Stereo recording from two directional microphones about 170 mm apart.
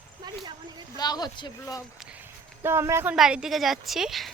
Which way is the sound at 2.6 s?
15° right (ahead or behind).